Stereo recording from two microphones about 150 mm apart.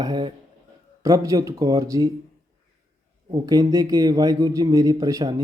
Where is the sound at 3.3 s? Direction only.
25° right (ahead or behind).